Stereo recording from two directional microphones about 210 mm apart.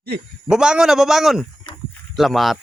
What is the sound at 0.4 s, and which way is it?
Speech, 5° right (ahead or behind).